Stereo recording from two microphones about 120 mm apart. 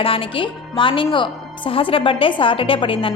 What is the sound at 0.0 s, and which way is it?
A woman's voice, 50° left (ahead or behind).